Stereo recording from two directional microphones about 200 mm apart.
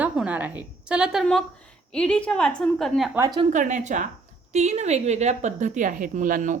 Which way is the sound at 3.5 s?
40° right (ahead or behind).